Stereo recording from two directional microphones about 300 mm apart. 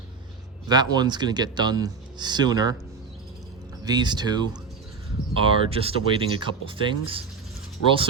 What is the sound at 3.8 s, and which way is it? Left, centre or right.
Speech, centre.